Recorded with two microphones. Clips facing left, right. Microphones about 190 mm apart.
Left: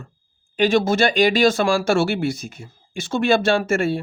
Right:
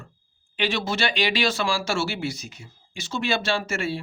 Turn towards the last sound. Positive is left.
turn(degrees=50)  # may be behind; listen again after turning